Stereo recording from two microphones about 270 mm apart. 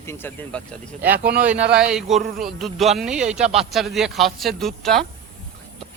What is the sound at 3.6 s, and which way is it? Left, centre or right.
Speech, centre.